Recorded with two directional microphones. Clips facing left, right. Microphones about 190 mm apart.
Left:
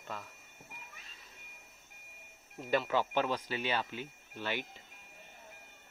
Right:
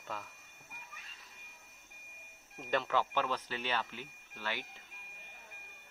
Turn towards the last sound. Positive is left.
turn(degrees=20)  # may be behind; listen again after turning